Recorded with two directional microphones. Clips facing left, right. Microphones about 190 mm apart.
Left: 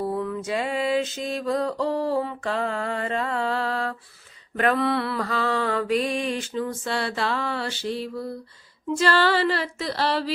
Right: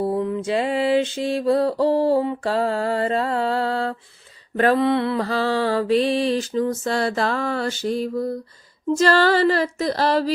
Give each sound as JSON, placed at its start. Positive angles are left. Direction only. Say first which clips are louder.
{"t": 0.0, "sound": "mantra", "louder": "right 5 dB", "side_deg": -25}
{"t": 9.0, "sound": "music", "louder": "right 4 dB", "side_deg": -40}